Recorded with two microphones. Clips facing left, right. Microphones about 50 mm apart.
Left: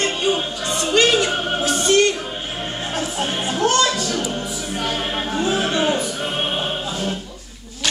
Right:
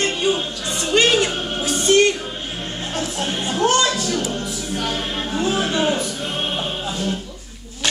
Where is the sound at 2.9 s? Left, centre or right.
Centre.